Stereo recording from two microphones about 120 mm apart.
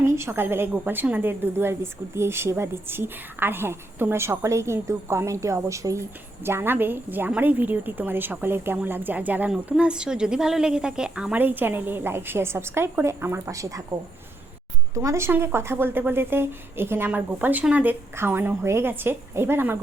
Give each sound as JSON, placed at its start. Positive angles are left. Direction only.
{"t": 0.0, "sound": "a woman's voice", "side_deg": -20}
{"t": 14.9, "sound": "a woman's voice", "side_deg": -25}